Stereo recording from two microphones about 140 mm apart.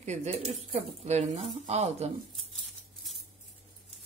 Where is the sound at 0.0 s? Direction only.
55° right (ahead or behind).